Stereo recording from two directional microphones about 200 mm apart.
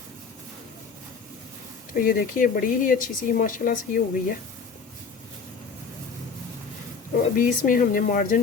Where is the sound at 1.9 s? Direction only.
45° left (ahead or behind).